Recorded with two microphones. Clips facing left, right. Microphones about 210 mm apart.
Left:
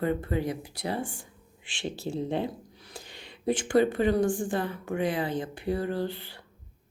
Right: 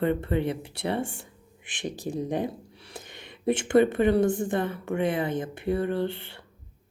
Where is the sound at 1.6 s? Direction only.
20° right (ahead or behind).